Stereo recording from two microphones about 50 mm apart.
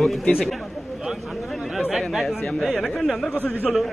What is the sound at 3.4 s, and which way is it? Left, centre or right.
Speech, left.